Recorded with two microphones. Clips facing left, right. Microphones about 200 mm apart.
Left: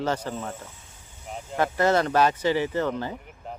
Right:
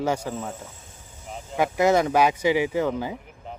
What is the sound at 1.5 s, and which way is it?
Speech, 15° right (ahead or behind).